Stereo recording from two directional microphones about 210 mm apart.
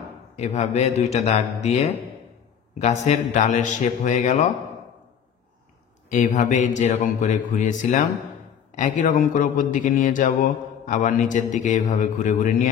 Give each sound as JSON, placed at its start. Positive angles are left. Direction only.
{"t": 0.4, "sound": "speech", "side_deg": 30}
{"t": 6.0, "sound": "speech", "side_deg": 35}